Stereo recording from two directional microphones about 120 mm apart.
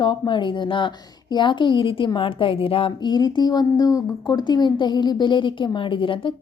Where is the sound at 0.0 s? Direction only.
40° left (ahead or behind).